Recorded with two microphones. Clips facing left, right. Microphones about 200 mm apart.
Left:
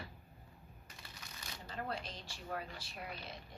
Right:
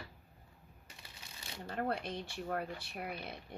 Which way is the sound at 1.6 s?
60° right (ahead or behind).